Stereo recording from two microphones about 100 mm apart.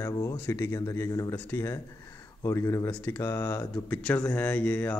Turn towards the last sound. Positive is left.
turn(degrees=15)  # may be behind; listen again after turning